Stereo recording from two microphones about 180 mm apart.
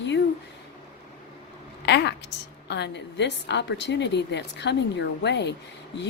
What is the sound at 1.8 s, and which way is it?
A woman's voice, 70° left (ahead or behind).